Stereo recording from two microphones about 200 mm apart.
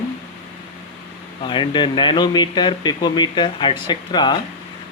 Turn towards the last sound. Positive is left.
turn(degrees=20)  # may be behind; listen again after turning